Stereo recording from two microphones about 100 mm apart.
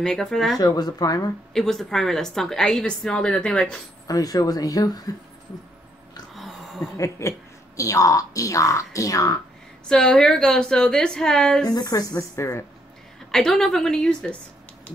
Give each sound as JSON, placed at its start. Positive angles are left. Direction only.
{"t": 0.0, "sound": "a woman's voice", "side_deg": 5}
{"t": 0.6, "sound": "a woman's voice", "side_deg": 40}
{"t": 1.5, "sound": "a woman's voice", "side_deg": 5}
{"t": 4.1, "sound": "a woman's voice", "side_deg": 35}
{"t": 6.3, "sound": "a sound", "side_deg": 0}
{"t": 7.0, "sound": "a woman's voice", "side_deg": 30}
{"t": 9.8, "sound": "a woman's voice", "side_deg": 5}
{"t": 11.7, "sound": "a woman's voice", "side_deg": 40}
{"t": 13.3, "sound": "a woman's voice", "side_deg": 5}